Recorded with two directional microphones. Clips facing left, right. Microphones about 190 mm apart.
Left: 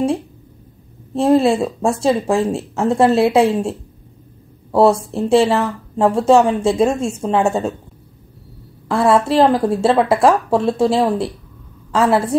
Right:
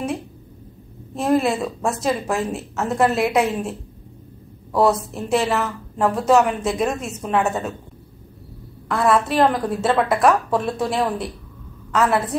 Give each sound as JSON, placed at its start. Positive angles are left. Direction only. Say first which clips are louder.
{"t": 1.1, "sound": "speech", "louder": "left 6 dB", "side_deg": 30}
{"t": 4.7, "sound": "speech", "louder": "left 5 dB", "side_deg": 30}
{"t": 8.8, "sound": "speech", "louder": "left 4 dB", "side_deg": 30}